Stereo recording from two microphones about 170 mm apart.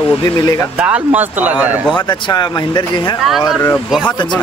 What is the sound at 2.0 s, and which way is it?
Speech, 25° left (ahead or behind).